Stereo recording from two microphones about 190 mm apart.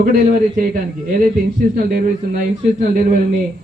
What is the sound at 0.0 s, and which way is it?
Speech, 50° right (ahead or behind).